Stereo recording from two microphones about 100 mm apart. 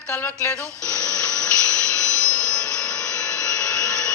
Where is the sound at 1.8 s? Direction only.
10° left (ahead or behind).